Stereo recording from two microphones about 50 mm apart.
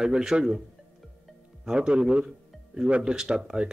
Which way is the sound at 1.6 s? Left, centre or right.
Right.